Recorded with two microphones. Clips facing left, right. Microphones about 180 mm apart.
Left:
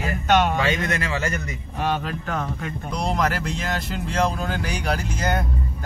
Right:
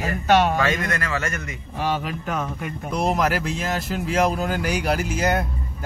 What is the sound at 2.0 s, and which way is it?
Speech, 10° right (ahead or behind).